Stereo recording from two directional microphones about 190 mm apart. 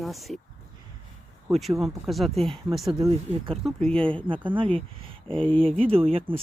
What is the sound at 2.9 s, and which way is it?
Speech, 25° right (ahead or behind).